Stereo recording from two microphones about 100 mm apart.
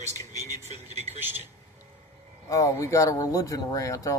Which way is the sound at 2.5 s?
35° left (ahead or behind).